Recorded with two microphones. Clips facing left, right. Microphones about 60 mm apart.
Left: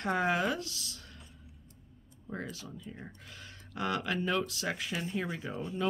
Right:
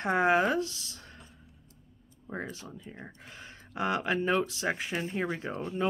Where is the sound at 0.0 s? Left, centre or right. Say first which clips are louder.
Right 5 dB; right.